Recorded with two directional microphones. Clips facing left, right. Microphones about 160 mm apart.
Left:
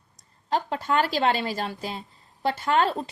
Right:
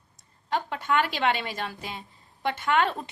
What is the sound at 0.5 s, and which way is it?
A woman's voice, 35° left (ahead or behind).